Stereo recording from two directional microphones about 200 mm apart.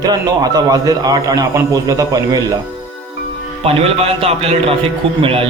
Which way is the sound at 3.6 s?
30° right (ahead or behind).